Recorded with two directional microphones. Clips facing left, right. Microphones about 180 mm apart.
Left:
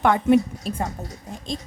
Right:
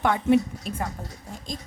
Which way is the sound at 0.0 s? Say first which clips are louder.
Left 3 dB; 55° left (ahead or behind).